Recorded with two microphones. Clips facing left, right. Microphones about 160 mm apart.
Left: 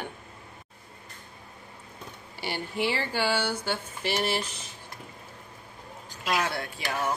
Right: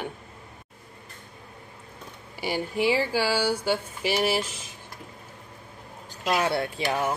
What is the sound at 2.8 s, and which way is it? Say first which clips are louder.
Speech: right 4 dB; 10° right (ahead or behind).